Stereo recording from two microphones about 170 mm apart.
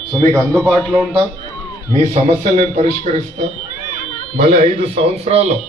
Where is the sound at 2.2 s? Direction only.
45° right (ahead or behind).